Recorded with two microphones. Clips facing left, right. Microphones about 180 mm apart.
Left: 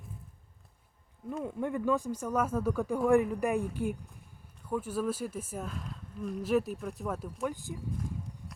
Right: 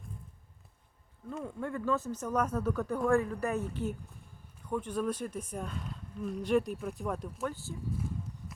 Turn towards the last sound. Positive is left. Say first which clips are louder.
# left 2 dB
turn(degrees=15)  # may be behind; listen again after turning